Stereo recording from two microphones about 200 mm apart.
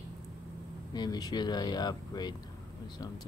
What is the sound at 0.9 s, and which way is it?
Speech, 20° left (ahead or behind).